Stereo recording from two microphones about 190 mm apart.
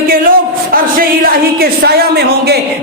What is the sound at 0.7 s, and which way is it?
Speech, 50° right (ahead or behind).